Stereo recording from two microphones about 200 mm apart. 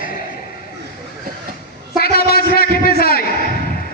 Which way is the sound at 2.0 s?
50° left (ahead or behind).